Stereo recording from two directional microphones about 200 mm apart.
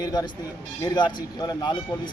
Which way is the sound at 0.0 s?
20° left (ahead or behind).